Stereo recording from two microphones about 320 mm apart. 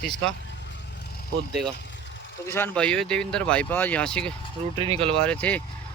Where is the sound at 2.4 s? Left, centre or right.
Centre.